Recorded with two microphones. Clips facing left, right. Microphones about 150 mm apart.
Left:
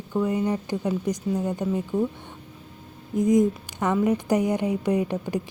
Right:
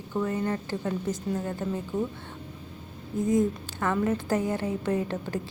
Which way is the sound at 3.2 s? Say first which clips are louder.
Left 5 dB; 15° left (ahead or behind).